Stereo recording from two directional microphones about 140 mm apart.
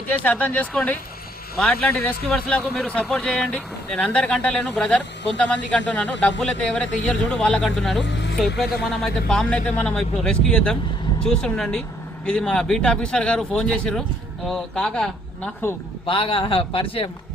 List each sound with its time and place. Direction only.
0.1 s speech: 10° left (ahead or behind)
16.0 s a man's voice: 40° left (ahead or behind)